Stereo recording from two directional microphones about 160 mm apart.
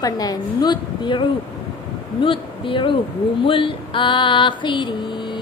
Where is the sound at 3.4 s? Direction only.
35° left (ahead or behind).